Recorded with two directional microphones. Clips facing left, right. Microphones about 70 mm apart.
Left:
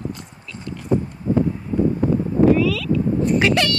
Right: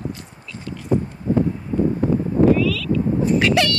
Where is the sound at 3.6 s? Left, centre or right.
Centre.